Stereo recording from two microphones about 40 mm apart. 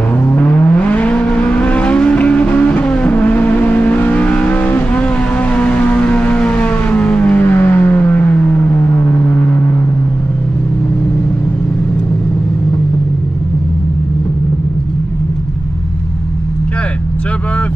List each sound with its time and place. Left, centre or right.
0.3 s vehicle: left
4.9 s siren: left
7.3 s music: left
7.9 s vehicle: left